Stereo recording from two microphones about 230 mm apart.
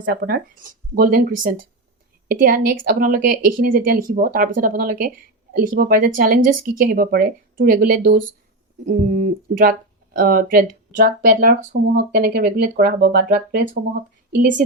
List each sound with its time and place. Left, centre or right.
0.0 s speech: right